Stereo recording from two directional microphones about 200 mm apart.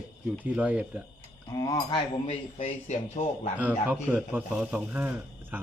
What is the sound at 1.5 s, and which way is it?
Speech, 20° left (ahead or behind).